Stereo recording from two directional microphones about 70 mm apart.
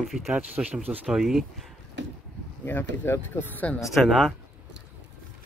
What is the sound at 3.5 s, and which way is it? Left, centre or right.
Speech, centre.